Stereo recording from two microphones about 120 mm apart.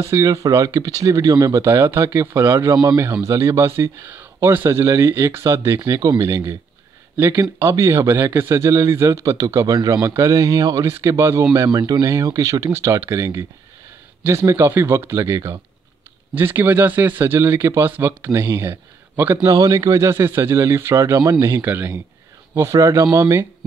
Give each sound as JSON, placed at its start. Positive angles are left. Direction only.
{"t": 0.0, "sound": "a man's voice", "side_deg": -25}
{"t": 2.7, "sound": "a man's voice", "side_deg": -30}
{"t": 19.3, "sound": "a man's voice", "side_deg": -30}